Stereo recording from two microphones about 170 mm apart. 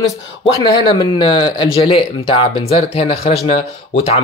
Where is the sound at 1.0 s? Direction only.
25° left (ahead or behind).